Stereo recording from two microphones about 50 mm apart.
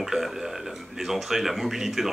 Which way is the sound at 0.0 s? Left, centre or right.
Centre.